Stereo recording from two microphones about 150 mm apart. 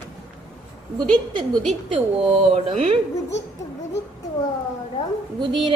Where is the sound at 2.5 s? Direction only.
50° right (ahead or behind).